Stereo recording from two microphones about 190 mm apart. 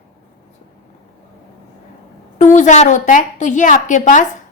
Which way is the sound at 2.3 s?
40° left (ahead or behind).